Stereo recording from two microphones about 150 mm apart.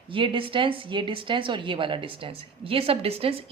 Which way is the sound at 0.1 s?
35° right (ahead or behind).